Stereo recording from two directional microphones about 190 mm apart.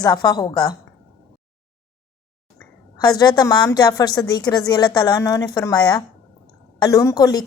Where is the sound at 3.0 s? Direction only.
20° left (ahead or behind).